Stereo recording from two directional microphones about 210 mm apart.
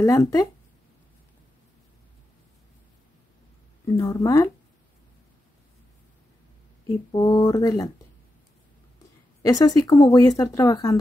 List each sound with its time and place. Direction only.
0.0 s speech: 15° left (ahead or behind)
3.8 s speech: 15° left (ahead or behind)
7.1 s speech: 15° left (ahead or behind)
9.4 s speech: 15° left (ahead or behind)